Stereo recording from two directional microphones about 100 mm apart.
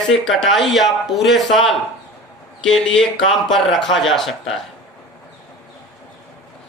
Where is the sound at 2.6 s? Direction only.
5° left (ahead or behind).